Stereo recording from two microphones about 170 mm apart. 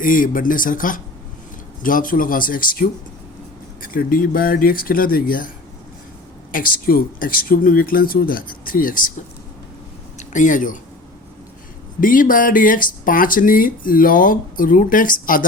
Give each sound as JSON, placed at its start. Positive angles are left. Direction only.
{"t": 0.0, "sound": "speech", "side_deg": 55}
{"t": 6.5, "sound": "speech", "side_deg": 55}
{"t": 10.2, "sound": "speech", "side_deg": 50}
{"t": 11.9, "sound": "speech", "side_deg": 55}